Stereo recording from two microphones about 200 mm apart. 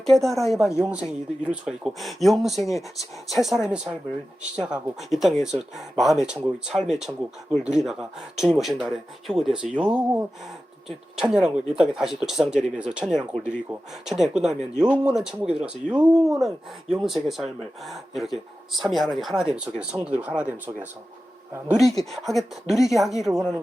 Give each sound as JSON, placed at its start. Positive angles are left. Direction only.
{"t": 0.0, "sound": "speech", "side_deg": 0}
{"t": 11.2, "sound": "speech", "side_deg": -5}